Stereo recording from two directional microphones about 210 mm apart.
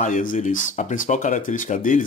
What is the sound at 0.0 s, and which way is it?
Speech, 40° left (ahead or behind).